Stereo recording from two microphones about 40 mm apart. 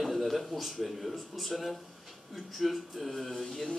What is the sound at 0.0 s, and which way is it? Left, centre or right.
Speech, centre.